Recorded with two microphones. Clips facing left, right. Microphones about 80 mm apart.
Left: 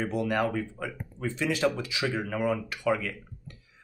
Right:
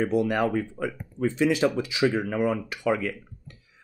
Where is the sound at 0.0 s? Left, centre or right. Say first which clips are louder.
Right 4 dB; centre.